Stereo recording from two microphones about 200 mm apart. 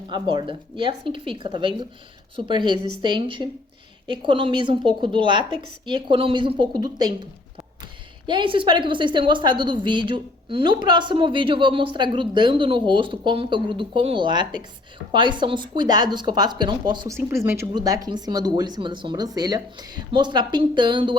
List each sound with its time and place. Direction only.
0.1 s a woman's voice: 25° right (ahead or behind)
8.3 s a woman's voice: 25° right (ahead or behind)